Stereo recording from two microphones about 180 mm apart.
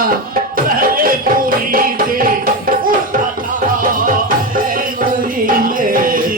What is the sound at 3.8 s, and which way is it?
Music, 50° right (ahead or behind).